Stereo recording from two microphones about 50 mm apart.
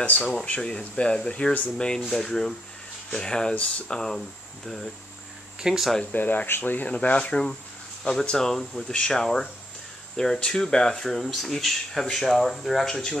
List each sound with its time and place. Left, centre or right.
0.0 s speech: left
0.6 s speech: centre
2.0 s speech: centre; by 4.0 s left
4.6 s speech: centre
5.6 s speech: centre
6.1 s speech: left
8.0 s speech: centre